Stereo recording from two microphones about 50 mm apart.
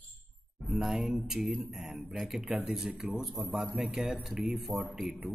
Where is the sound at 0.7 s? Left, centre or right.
Centre.